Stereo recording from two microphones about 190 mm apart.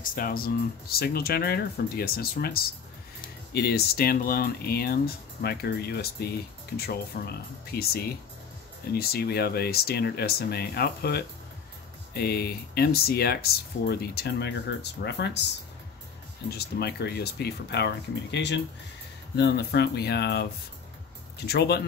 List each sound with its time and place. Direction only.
0.0 s speech: 45° left (ahead or behind); by 15.4 s 65° left (ahead or behind)
16.4 s speech: 55° left (ahead or behind)
21.5 s speech: 60° left (ahead or behind)